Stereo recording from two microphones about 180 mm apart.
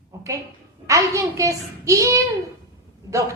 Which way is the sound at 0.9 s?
20° right (ahead or behind).